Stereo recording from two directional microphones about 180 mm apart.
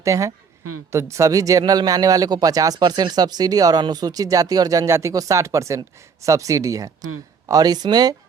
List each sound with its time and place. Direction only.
0.0 s speech: 15° right (ahead or behind)